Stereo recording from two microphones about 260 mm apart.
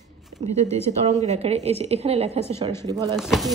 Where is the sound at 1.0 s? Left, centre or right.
Right.